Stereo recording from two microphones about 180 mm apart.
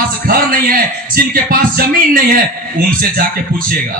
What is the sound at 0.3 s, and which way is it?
Speech, 55° right (ahead or behind).